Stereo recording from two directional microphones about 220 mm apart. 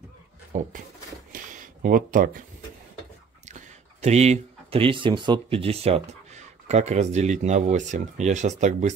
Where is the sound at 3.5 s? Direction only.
30° right (ahead or behind).